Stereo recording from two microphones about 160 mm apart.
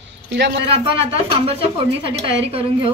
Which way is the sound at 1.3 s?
35° right (ahead or behind).